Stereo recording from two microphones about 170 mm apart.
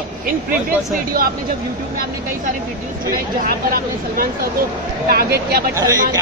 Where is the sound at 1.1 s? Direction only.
60° right (ahead or behind).